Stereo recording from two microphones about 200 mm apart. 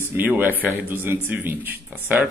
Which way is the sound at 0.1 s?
10° right (ahead or behind).